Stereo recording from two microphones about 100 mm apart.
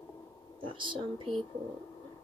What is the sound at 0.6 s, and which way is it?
Speech, 55° right (ahead or behind).